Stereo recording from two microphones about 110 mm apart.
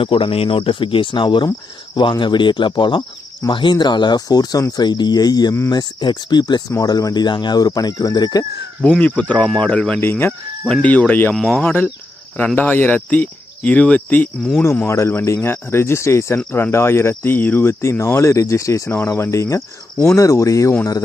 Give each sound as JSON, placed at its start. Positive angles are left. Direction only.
{"t": 0.0, "sound": "speech", "side_deg": 55}
{"t": 8.8, "sound": "speech", "side_deg": 10}
{"t": 10.0, "sound": "speech", "side_deg": 20}
{"t": 14.8, "sound": "speech", "side_deg": 25}